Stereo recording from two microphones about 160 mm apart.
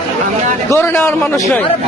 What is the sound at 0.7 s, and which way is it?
Speech, 15° left (ahead or behind).